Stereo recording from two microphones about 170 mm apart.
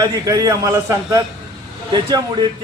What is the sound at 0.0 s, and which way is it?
A man's voice, 20° right (ahead or behind).